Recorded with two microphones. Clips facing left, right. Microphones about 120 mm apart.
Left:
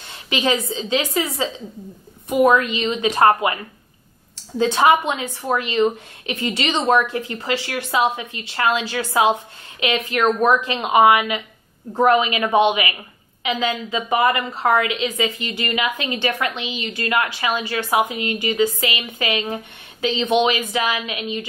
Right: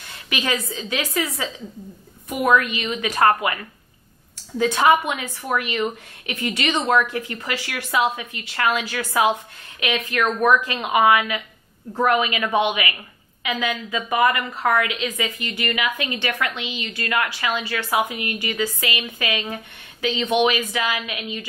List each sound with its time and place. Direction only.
0.3 s a woman's voice: 25° left (ahead or behind)